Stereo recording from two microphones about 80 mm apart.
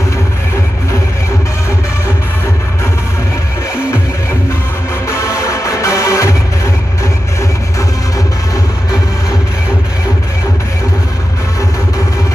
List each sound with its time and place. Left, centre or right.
5.4 s music: left